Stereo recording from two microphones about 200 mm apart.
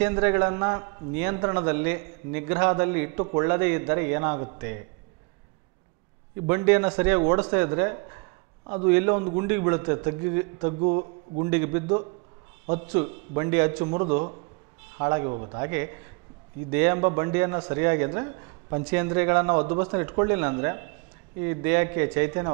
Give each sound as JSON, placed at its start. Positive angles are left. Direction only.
{"t": 0.0, "sound": "a man's voice", "side_deg": -15}
{"t": 6.4, "sound": "a man's voice", "side_deg": -15}
{"t": 15.3, "sound": "a man's voice", "side_deg": -25}
{"t": 15.6, "sound": "a man's voice", "side_deg": -15}